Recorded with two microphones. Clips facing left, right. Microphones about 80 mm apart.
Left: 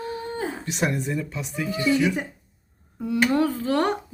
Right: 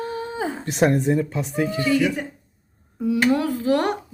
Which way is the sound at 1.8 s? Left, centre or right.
Centre.